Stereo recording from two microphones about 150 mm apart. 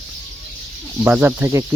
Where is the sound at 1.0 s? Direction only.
10° right (ahead or behind).